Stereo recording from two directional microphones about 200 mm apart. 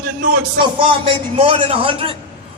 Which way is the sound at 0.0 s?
45° right (ahead or behind).